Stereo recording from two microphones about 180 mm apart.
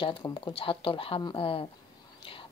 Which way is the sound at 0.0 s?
25° left (ahead or behind).